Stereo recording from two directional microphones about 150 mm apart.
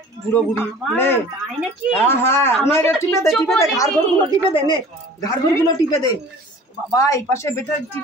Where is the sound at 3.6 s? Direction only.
20° left (ahead or behind).